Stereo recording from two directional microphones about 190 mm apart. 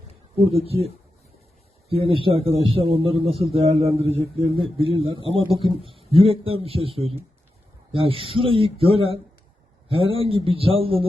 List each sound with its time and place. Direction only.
1.9 s a man's voice: 30° right (ahead or behind)